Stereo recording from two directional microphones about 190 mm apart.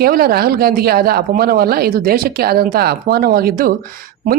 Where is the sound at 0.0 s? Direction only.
55° right (ahead or behind).